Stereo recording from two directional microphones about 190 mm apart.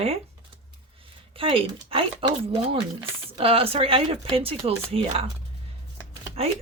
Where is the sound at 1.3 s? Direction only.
30° right (ahead or behind).